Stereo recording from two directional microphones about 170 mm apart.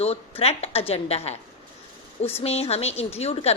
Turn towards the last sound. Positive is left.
turn(degrees=40)  # may be behind; listen again after turning